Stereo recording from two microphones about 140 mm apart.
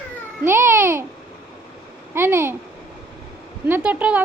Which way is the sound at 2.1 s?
15° right (ahead or behind).